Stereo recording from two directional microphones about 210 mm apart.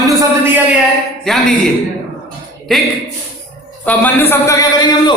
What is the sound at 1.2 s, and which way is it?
Speech, centre (ahead or behind).